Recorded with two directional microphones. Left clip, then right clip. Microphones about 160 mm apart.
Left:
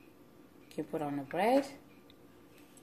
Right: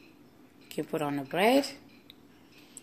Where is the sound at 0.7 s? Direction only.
45° right (ahead or behind).